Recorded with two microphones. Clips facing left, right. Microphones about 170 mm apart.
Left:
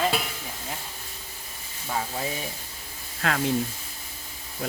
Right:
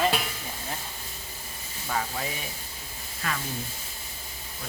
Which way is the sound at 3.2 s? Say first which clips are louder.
Left 8 dB; 70° left (ahead or behind).